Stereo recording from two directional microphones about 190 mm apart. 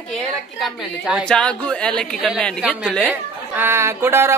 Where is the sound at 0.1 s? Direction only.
Centre (ahead or behind).